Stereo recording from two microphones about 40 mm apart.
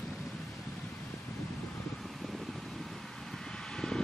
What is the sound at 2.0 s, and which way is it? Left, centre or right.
Vehicle, centre.